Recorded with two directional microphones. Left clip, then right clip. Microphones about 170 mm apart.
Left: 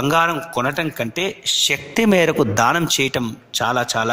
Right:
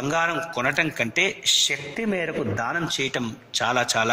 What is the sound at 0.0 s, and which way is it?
Speech, 30° left (ahead or behind).